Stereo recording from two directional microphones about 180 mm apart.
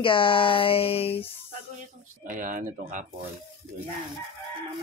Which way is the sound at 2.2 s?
45° right (ahead or behind).